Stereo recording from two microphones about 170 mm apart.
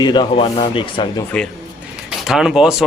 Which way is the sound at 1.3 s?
5° left (ahead or behind).